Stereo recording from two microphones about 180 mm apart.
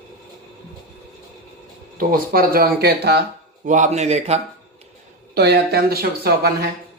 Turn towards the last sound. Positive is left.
turn(degrees=-60)  # may be behind; listen again after turning